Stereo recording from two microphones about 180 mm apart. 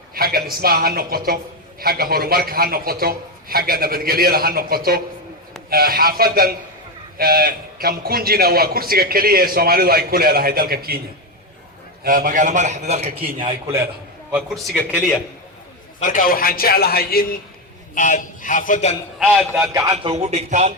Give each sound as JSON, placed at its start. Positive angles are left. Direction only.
{"t": 0.1, "sound": "a man's voice", "side_deg": -55}
{"t": 12.0, "sound": "a man's voice", "side_deg": -50}
{"t": 14.3, "sound": "a man's voice", "side_deg": 0}
{"t": 16.0, "sound": "a man's voice", "side_deg": 50}
{"t": 17.9, "sound": "a man's voice", "side_deg": 45}
{"t": 19.2, "sound": "a man's voice", "side_deg": 5}
{"t": 19.7, "sound": "speech", "side_deg": -25}